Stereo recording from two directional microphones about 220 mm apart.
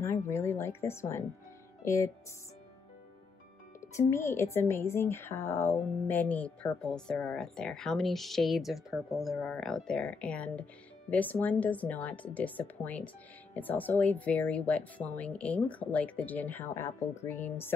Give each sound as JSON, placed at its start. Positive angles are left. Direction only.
{"t": 0.0, "sound": "a woman's voice", "side_deg": 10}
{"t": 3.8, "sound": "a woman's voice", "side_deg": 10}